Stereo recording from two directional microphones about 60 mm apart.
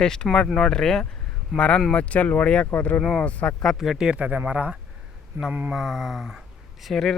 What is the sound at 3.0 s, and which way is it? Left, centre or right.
Speech, centre.